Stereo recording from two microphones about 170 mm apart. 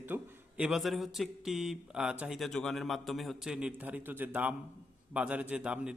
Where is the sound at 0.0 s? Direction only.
10° right (ahead or behind).